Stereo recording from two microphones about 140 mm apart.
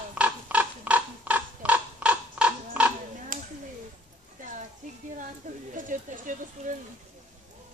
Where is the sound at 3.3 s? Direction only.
70° right (ahead or behind).